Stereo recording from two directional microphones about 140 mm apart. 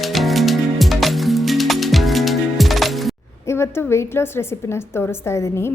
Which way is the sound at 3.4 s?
20° left (ahead or behind).